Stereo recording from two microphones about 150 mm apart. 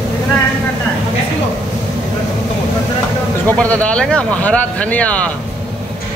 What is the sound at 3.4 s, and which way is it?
Speech, 10° left (ahead or behind).